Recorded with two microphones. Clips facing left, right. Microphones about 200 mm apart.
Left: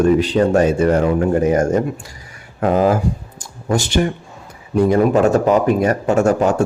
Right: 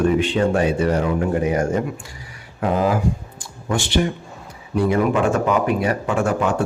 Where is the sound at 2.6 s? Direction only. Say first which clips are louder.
Left 4 dB; 45° left (ahead or behind).